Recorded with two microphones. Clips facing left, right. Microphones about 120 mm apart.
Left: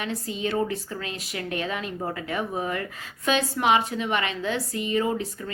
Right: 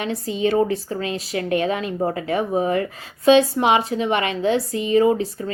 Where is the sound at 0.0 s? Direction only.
30° right (ahead or behind).